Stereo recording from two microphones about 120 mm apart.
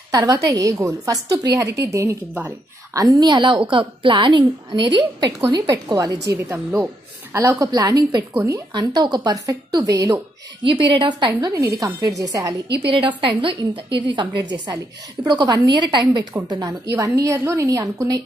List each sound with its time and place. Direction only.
0.4 s a woman's voice: 25° right (ahead or behind)
8.7 s a woman's voice: 35° right (ahead or behind)
10.6 s a woman's voice: 45° right (ahead or behind)
11.5 s a woman's voice: 30° right (ahead or behind)
13.2 s a woman's voice: 45° right (ahead or behind)